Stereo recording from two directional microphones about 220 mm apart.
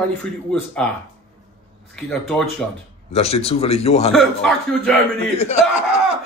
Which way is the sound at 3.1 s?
30° left (ahead or behind).